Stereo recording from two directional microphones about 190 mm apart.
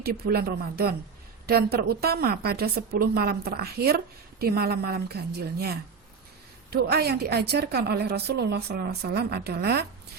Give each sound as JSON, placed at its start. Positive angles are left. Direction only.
{"t": 0.0, "sound": "a woman's voice", "side_deg": -55}